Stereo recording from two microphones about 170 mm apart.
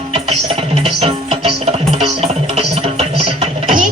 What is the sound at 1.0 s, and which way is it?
Music, 35° right (ahead or behind).